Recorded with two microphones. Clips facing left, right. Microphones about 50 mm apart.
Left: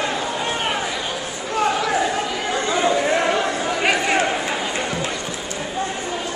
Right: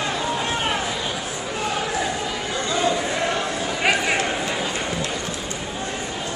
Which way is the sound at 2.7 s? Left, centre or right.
Centre.